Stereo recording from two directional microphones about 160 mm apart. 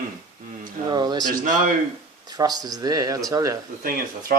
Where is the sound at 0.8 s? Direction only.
25° right (ahead or behind).